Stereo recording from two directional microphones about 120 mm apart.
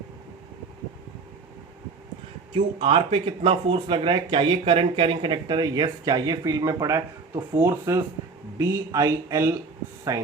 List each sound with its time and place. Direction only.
2.5 s speech: 45° right (ahead or behind); by 10.2 s 30° right (ahead or behind)